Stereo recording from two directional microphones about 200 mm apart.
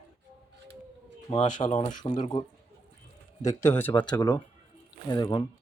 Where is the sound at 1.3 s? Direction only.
35° left (ahead or behind).